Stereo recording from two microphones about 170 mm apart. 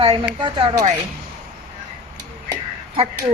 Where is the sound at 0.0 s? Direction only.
25° right (ahead or behind).